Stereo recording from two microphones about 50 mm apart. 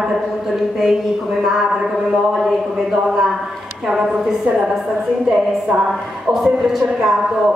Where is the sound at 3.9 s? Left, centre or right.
Centre.